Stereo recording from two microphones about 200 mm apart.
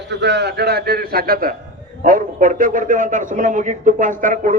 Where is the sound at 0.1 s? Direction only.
60° right (ahead or behind).